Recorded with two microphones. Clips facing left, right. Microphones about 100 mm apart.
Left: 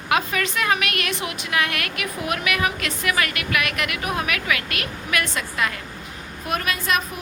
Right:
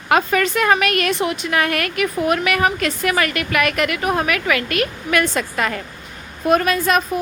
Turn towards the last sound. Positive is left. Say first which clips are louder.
# right 7 dB
turn(degrees=-40)  # may be behind; listen again after turning